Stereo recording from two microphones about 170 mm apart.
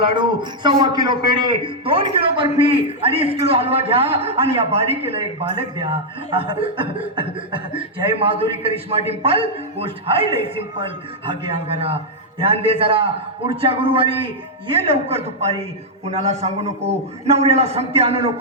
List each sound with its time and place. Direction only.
0.1 s a man's voice: 25° right (ahead or behind)